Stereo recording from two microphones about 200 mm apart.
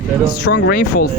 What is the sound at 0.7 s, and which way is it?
Speech, 45° left (ahead or behind).